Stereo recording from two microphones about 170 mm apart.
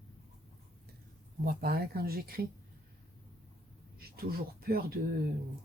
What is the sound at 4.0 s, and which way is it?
Speech, 65° right (ahead or behind).